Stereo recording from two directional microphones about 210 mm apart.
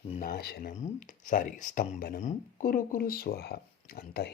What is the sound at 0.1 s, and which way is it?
Speech, 40° left (ahead or behind).